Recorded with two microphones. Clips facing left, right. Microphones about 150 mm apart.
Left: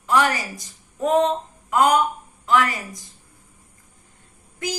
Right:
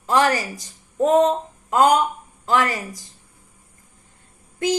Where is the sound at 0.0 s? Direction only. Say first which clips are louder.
Right 2 dB; 35° right (ahead or behind).